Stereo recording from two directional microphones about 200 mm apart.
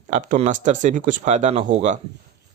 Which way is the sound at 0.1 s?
40° right (ahead or behind).